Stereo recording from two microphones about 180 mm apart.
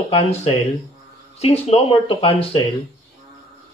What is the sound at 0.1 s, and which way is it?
A man's voice, 35° left (ahead or behind).